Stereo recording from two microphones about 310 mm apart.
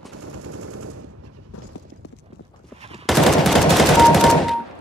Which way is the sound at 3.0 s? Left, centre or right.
Centre.